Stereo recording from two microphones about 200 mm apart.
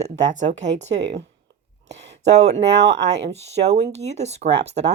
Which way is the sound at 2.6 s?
60° right (ahead or behind).